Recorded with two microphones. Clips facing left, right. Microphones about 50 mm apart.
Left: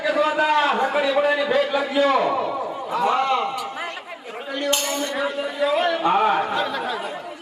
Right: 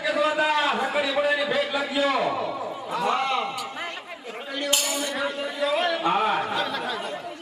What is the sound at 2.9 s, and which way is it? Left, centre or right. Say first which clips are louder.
Speech: left 4 dB; centre.